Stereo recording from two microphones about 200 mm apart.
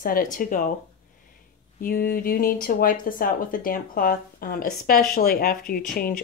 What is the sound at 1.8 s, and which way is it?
Speech, 50° left (ahead or behind).